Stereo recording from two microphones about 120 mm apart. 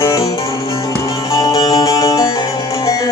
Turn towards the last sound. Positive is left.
turn(degrees=30)  # may be behind; listen again after turning